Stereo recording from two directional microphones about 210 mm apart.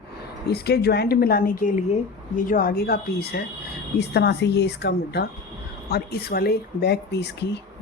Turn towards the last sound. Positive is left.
turn(degrees=55)  # may be behind; listen again after turning